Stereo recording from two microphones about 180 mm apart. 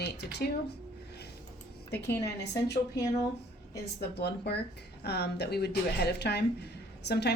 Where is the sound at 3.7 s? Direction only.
65° left (ahead or behind).